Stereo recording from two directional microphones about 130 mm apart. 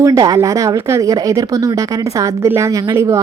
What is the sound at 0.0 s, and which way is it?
Speech, 25° right (ahead or behind).